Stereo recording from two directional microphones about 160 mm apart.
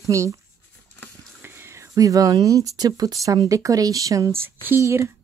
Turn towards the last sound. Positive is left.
turn(degrees=-15)  # may be behind; listen again after turning